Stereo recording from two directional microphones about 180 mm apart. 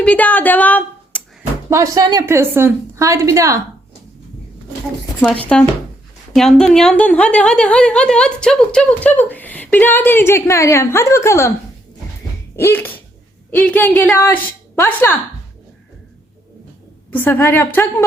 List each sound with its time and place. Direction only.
0.0 s speech: 10° left (ahead or behind)
1.7 s a woman's voice: 20° right (ahead or behind)
5.5 s a woman's voice: 5° left (ahead or behind)
12.5 s a woman's voice: 15° left (ahead or behind)
17.1 s a woman's voice: 10° left (ahead or behind)